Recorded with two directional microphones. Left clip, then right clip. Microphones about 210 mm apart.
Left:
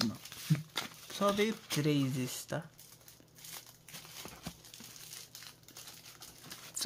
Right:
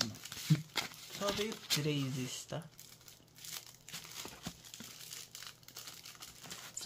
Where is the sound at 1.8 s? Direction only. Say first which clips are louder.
Left 5 dB; 30° left (ahead or behind).